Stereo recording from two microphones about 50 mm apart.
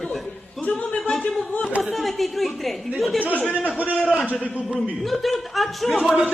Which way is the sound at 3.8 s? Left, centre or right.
Right.